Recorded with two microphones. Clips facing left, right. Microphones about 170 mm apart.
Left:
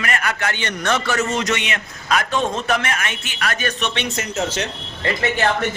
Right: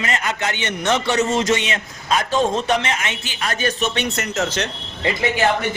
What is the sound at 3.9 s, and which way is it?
Speech, 60° right (ahead or behind).